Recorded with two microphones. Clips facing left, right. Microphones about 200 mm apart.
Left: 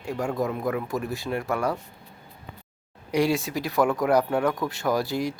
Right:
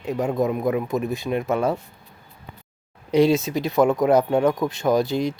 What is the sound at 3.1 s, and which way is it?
Speech, 20° right (ahead or behind).